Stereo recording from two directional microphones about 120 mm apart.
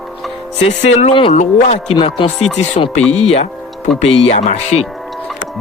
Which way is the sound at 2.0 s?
50° left (ahead or behind).